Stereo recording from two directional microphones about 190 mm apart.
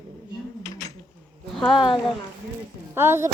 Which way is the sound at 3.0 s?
15° right (ahead or behind).